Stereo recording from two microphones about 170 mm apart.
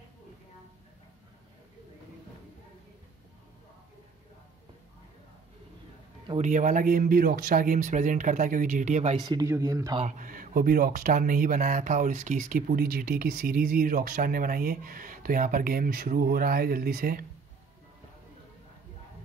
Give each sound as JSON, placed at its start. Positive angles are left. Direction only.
{"t": 6.2, "sound": "speech", "side_deg": -40}
{"t": 9.2, "sound": "speech", "side_deg": -20}
{"t": 10.0, "sound": "speech", "side_deg": -50}